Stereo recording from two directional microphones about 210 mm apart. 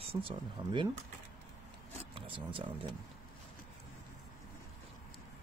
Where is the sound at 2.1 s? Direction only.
25° right (ahead or behind).